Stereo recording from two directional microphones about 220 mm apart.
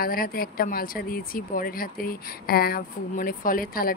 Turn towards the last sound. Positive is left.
turn(degrees=40)  # may be behind; listen again after turning